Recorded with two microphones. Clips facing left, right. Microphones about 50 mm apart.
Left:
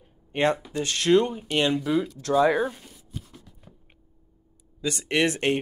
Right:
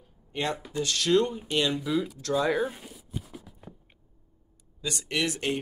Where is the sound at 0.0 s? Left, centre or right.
Left.